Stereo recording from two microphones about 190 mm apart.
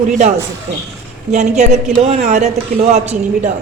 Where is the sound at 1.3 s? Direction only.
35° right (ahead or behind).